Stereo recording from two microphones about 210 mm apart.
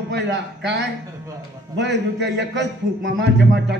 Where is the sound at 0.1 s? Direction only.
55° right (ahead or behind).